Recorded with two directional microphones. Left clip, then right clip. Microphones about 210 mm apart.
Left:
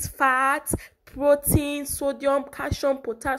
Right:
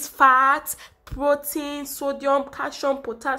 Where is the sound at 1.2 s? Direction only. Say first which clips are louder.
Left 2 dB; 15° left (ahead or behind).